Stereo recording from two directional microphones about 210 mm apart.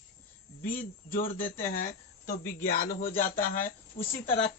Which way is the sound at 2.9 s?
40° left (ahead or behind).